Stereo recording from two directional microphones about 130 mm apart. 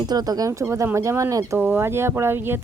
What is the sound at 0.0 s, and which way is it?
Speech, 30° right (ahead or behind).